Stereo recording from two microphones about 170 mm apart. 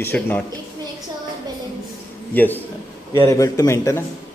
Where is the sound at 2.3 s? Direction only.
10° left (ahead or behind).